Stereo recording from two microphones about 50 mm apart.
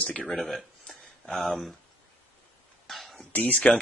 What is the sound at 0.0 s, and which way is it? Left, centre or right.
Speech, left.